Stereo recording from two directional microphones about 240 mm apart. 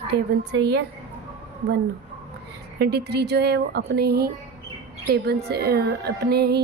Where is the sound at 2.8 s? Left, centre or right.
Right.